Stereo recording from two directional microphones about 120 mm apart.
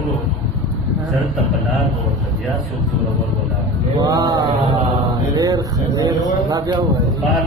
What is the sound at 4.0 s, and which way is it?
Mantra, 30° right (ahead or behind).